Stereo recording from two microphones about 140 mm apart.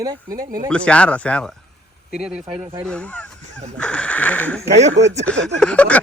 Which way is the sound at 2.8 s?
5° left (ahead or behind).